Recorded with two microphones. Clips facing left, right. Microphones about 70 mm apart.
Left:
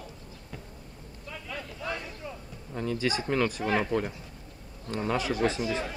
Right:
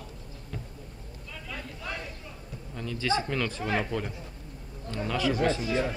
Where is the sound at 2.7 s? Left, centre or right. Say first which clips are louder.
Even; left.